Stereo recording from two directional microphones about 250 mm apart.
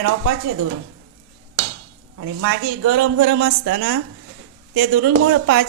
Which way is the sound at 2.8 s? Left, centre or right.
Right.